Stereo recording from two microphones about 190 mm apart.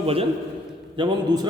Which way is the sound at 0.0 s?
30° right (ahead or behind).